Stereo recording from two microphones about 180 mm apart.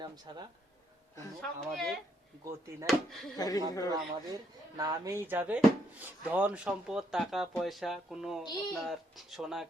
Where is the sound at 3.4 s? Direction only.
20° left (ahead or behind).